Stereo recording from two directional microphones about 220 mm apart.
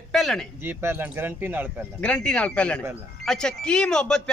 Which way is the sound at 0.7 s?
10° right (ahead or behind).